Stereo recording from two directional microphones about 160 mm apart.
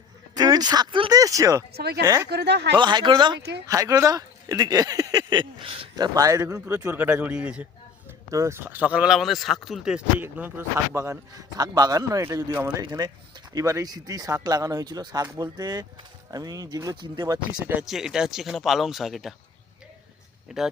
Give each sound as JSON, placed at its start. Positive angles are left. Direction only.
{"t": 0.3, "sound": "speech", "side_deg": -25}
{"t": 1.7, "sound": "speech", "side_deg": -90}
{"t": 2.7, "sound": "speech", "side_deg": -30}
{"t": 6.1, "sound": "speech", "side_deg": -20}
{"t": 8.3, "sound": "speech", "side_deg": -20}
{"t": 17.6, "sound": "speech", "side_deg": -10}